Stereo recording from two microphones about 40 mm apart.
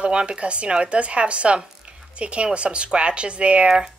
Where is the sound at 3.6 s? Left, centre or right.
Centre.